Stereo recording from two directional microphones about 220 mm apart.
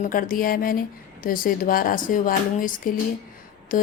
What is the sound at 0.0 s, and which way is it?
Speech, 40° left (ahead or behind).